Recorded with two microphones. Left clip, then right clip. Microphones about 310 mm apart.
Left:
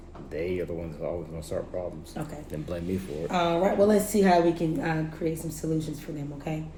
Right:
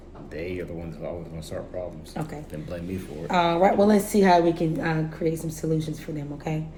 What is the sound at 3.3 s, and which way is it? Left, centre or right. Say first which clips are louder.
A woman's voice: right 5 dB; right.